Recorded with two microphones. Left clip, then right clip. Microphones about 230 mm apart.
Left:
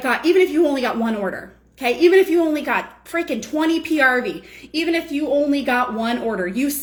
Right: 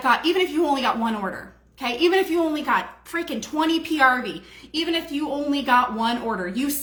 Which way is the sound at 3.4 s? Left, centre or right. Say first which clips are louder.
Left 2 dB; centre.